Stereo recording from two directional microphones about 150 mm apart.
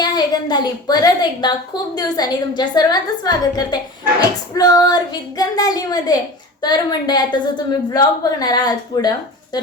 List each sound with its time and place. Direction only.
0.0 s a woman's voice: 25° left (ahead or behind)